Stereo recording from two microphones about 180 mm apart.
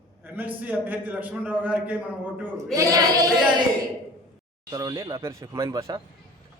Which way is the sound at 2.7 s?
20° right (ahead or behind).